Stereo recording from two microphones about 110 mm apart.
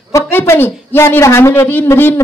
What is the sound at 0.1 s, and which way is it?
Speech, 25° left (ahead or behind).